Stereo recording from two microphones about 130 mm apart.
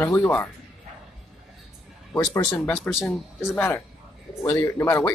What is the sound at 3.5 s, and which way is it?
Speech, 15° left (ahead or behind).